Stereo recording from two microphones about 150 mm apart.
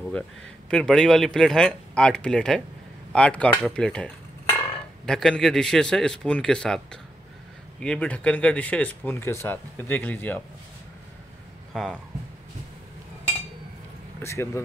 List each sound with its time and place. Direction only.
0.7 s speech: 5° left (ahead or behind)
11.7 s speech: centre (ahead or behind)
14.2 s speech: 20° left (ahead or behind)